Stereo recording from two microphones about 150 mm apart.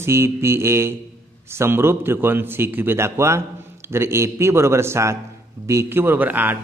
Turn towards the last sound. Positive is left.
turn(degrees=-10)  # may be behind; listen again after turning